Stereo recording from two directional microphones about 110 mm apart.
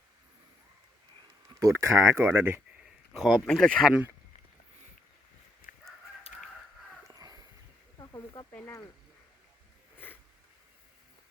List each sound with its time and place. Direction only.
1.6 s speech: 25° right (ahead or behind)
3.1 s speech: 5° right (ahead or behind)
3.4 s speech: 10° left (ahead or behind)
7.1 s a sound: 35° right (ahead or behind)
7.9 s snake: 35° left (ahead or behind)